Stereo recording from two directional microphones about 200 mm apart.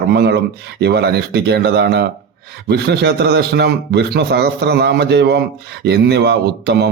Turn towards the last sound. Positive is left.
turn(degrees=-55)  # may be behind; listen again after turning